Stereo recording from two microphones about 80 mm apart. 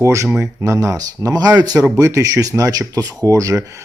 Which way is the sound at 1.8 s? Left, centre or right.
Right.